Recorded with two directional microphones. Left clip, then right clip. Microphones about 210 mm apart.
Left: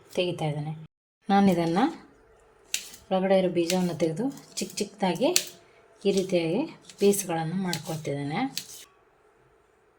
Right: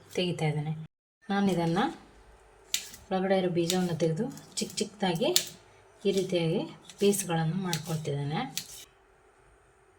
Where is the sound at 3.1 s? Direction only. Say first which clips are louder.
Left 4 dB; 30° left (ahead or behind).